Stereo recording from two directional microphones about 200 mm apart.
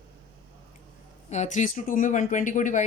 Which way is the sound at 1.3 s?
35° left (ahead or behind).